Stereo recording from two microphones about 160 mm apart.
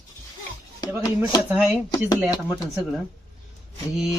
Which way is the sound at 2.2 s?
5° right (ahead or behind).